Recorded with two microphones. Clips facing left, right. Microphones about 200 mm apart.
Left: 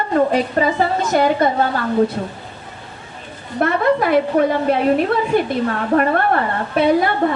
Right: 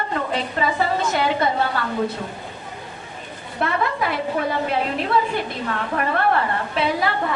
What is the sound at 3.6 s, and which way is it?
Speech, 50° left (ahead or behind).